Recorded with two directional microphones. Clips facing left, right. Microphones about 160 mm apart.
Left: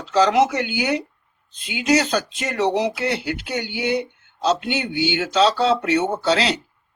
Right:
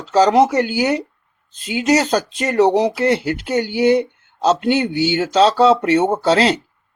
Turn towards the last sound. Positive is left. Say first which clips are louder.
# right 5 dB
turn(degrees=-45)  # may be behind; listen again after turning